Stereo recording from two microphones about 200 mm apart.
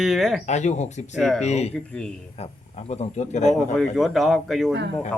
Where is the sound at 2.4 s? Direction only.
30° left (ahead or behind).